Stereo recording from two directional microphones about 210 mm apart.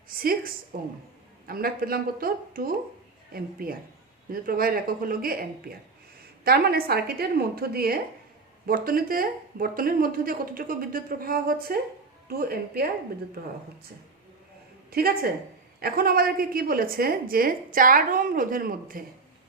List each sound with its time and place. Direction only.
0.1 s a woman's voice: 45° right (ahead or behind)
14.8 s a woman's voice: 45° right (ahead or behind)